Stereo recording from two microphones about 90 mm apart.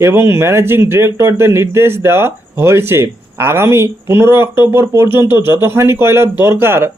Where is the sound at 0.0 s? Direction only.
25° right (ahead or behind).